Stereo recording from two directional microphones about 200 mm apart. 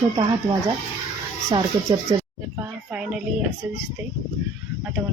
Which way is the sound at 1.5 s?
15° right (ahead or behind).